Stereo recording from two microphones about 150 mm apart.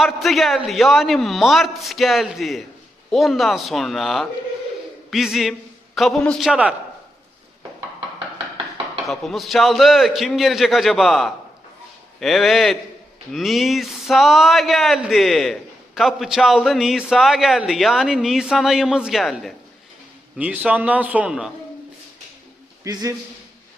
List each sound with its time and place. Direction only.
0.0 s speech: centre (ahead or behind)
9.0 s speech: centre (ahead or behind)
20.3 s a man's voice: 10° right (ahead or behind)
22.8 s a man's voice: 25° right (ahead or behind)